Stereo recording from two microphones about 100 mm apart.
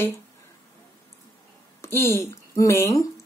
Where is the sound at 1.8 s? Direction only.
25° left (ahead or behind).